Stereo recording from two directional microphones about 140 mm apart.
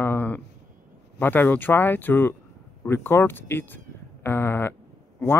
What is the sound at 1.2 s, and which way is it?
Speech, 15° left (ahead or behind).